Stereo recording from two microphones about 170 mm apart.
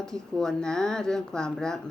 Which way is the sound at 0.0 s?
5° left (ahead or behind).